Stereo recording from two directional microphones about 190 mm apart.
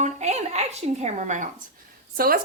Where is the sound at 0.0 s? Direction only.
35° right (ahead or behind).